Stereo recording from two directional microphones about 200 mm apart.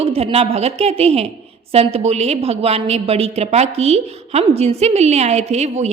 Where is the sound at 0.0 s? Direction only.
30° right (ahead or behind).